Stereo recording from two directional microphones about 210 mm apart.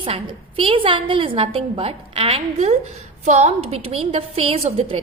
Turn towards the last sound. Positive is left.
turn(degrees=-30)  # may be behind; listen again after turning